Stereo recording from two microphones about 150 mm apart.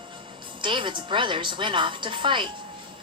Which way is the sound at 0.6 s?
35° right (ahead or behind).